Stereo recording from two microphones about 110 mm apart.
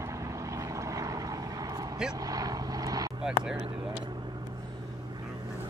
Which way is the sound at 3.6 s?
50° right (ahead or behind).